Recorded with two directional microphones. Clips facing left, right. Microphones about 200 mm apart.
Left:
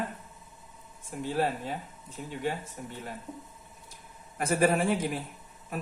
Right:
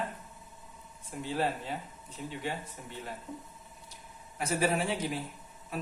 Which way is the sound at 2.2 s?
45° left (ahead or behind).